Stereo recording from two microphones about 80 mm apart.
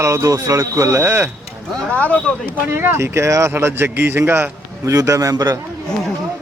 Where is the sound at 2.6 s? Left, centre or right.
Right.